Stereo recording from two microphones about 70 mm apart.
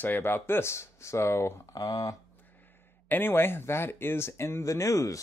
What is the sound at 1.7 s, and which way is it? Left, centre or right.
Speech, left.